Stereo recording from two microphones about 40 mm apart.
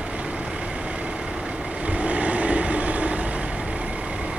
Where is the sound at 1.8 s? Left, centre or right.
Right.